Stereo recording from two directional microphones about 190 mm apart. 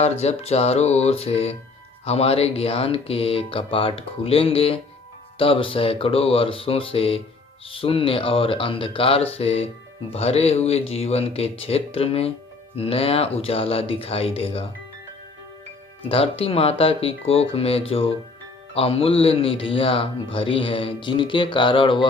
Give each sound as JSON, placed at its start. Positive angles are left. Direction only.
{"t": 0.0, "sound": "a man's voice", "side_deg": 35}
{"t": 16.0, "sound": "a man's voice", "side_deg": 30}